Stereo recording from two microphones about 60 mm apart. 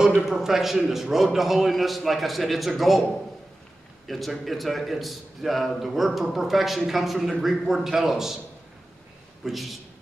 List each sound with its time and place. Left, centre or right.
0.2 s a man's voice: centre
4.1 s a man's voice: centre
9.4 s a man's voice: centre